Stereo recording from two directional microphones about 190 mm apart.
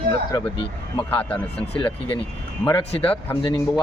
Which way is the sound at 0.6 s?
30° left (ahead or behind).